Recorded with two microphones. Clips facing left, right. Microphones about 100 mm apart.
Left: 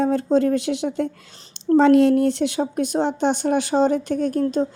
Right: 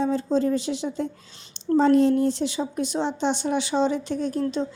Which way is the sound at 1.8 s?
70° left (ahead or behind).